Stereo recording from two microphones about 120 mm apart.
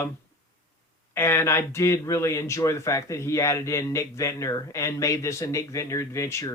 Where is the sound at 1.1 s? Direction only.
20° left (ahead or behind).